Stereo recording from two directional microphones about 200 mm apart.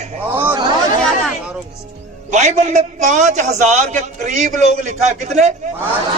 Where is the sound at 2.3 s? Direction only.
35° right (ahead or behind).